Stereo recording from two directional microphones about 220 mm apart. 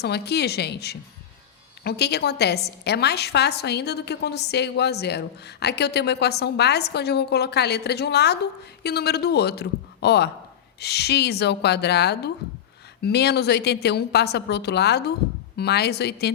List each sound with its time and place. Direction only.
0.0 s a woman's voice: 50° left (ahead or behind)